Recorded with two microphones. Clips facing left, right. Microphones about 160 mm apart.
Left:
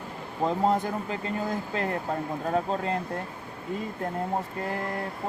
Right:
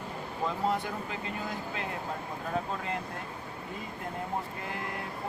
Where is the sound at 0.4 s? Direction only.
40° left (ahead or behind).